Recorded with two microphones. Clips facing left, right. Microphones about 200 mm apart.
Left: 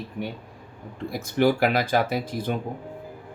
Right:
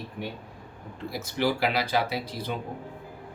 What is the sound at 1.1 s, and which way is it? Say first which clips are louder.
Speech: left 6 dB; 50° left (ahead or behind).